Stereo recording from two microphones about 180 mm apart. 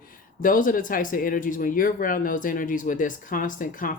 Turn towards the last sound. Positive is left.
turn(degrees=50)  # may be behind; listen again after turning